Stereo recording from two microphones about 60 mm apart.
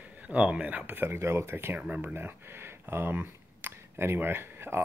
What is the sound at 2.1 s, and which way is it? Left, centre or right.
Speech, right.